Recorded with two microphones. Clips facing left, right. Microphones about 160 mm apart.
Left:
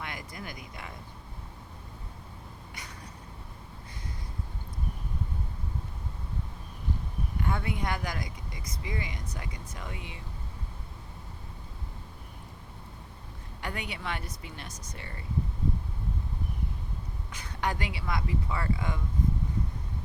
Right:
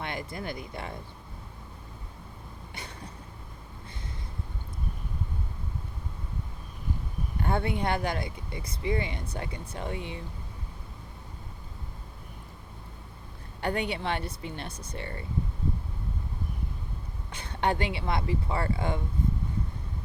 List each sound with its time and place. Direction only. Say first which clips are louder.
0.0 s speech: right 5 dB; 30° right (ahead or behind)
2.7 s a sound: right 5 dB; 30° right (ahead or behind)
7.4 s speech: right 5 dB; 30° right (ahead or behind)
13.6 s speech: right 8 dB; 30° right (ahead or behind)
17.3 s speech: right 5 dB; 30° right (ahead or behind)